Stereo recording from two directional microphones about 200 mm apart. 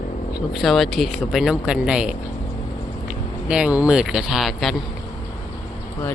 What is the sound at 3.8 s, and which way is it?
Speech, 5° right (ahead or behind).